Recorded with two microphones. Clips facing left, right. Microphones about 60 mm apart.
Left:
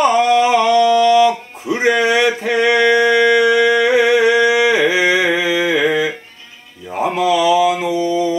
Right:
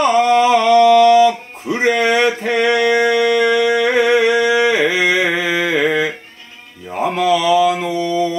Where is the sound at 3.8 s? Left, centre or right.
Right.